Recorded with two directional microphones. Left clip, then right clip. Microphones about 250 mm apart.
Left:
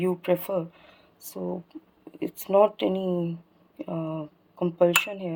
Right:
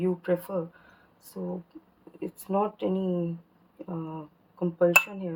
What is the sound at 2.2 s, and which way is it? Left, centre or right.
Speech, left.